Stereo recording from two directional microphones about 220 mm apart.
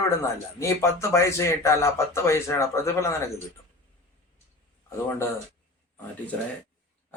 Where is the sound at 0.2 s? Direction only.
15° left (ahead or behind).